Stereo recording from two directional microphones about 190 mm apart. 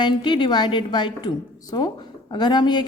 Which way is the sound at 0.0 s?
25° left (ahead or behind).